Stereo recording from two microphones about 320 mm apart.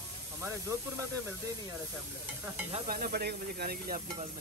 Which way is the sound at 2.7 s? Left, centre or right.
Right.